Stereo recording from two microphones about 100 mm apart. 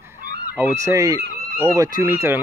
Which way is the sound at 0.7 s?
30° right (ahead or behind).